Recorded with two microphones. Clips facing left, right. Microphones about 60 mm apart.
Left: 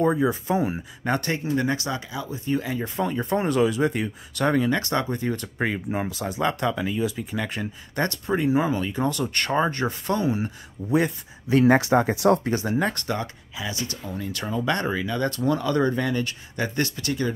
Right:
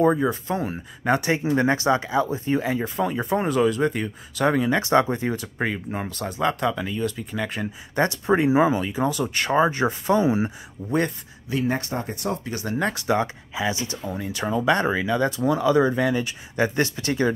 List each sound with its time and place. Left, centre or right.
0.0 s speech: centre
1.0 s speech: centre
1.5 s speech: right
2.8 s speech: centre
4.6 s speech: centre
5.3 s speech: centre
7.9 s speech: centre
10.2 s speech: right
10.9 s speech: centre
11.6 s speech: left
12.7 s speech: centre
13.0 s speech: centre
16.5 s speech: right